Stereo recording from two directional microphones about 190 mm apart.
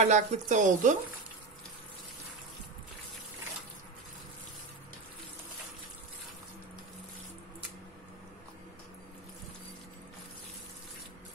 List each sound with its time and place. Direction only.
0.0 s speech: 40° right (ahead or behind)